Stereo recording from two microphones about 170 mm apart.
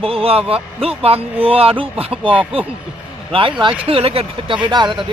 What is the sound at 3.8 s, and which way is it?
A man's voice, 35° right (ahead or behind).